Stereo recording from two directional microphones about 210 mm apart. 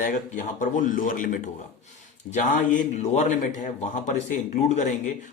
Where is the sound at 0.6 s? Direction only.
40° left (ahead or behind).